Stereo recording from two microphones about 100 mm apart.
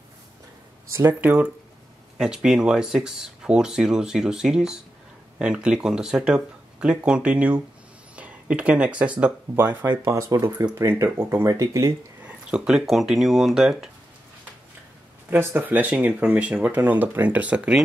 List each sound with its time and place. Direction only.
1.2 s speech: 15° right (ahead or behind)
10.1 s speech: 30° right (ahead or behind)
12.2 s speech: 10° right (ahead or behind)
15.2 s speech: 20° right (ahead or behind)